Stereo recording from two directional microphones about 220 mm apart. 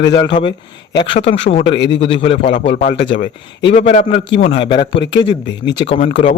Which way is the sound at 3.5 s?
55° left (ahead or behind).